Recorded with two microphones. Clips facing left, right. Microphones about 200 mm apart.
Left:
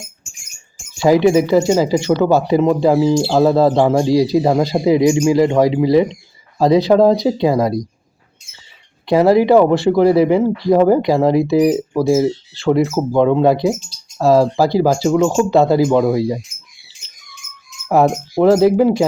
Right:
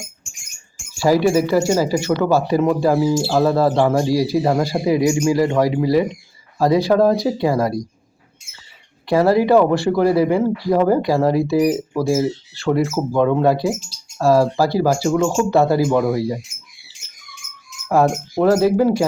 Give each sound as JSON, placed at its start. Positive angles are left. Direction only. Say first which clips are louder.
{"t": 0.9, "sound": "speech", "louder": "left 3 dB", "side_deg": 20}
{"t": 9.0, "sound": "speech", "louder": "left 3 dB", "side_deg": 20}
{"t": 17.8, "sound": "speech", "louder": "left 2 dB", "side_deg": 15}